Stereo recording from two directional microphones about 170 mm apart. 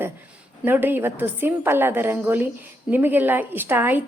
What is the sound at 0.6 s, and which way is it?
A woman's voice, 10° right (ahead or behind).